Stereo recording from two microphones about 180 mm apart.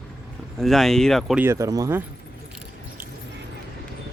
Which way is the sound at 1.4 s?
15° right (ahead or behind).